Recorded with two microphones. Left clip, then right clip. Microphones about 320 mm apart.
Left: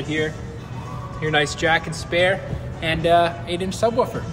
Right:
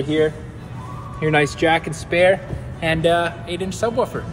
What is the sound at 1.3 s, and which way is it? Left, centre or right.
Speech, centre.